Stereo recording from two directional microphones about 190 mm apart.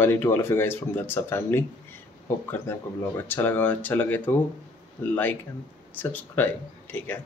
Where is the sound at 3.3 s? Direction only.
10° left (ahead or behind).